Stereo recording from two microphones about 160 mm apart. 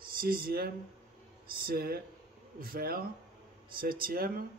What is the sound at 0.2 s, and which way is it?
Speech, 70° right (ahead or behind).